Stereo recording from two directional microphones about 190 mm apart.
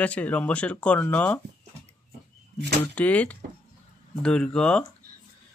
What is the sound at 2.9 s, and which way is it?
Speech, 5° left (ahead or behind).